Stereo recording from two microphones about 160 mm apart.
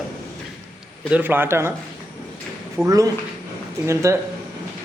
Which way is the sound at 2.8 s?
5° right (ahead or behind).